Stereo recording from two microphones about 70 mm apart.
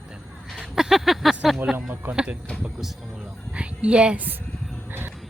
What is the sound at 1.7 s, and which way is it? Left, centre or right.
Speech, right.